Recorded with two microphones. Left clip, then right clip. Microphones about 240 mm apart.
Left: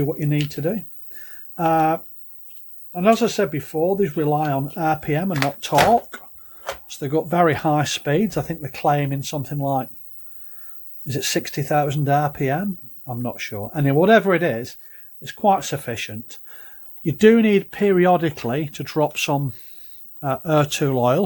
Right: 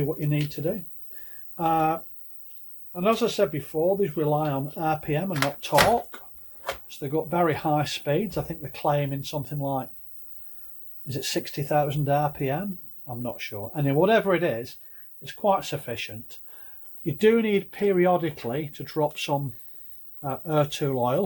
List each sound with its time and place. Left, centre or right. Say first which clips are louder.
0.6 s speech: left 5 dB; left
11.0 s speech: left 6 dB; left